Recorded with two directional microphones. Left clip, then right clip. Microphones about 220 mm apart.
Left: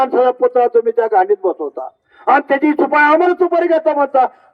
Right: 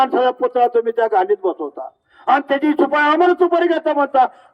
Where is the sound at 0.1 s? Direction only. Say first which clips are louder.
Left 4 dB; 30° left (ahead or behind).